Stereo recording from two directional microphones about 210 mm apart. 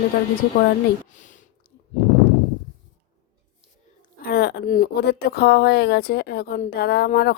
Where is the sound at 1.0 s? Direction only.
35° left (ahead or behind).